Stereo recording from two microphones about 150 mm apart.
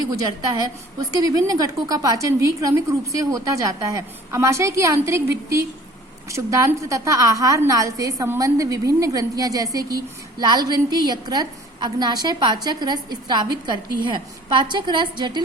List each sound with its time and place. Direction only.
1.1 s a woman's voice: 25° right (ahead or behind)